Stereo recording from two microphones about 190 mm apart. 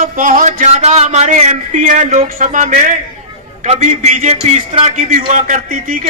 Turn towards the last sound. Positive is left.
turn(degrees=-45)  # may be behind; listen again after turning